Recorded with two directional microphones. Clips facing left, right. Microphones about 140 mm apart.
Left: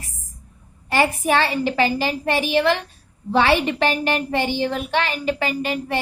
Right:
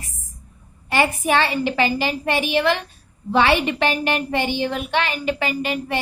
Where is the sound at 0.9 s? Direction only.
40° left (ahead or behind).